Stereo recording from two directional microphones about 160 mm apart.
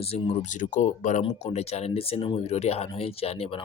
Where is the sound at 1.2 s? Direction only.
40° left (ahead or behind).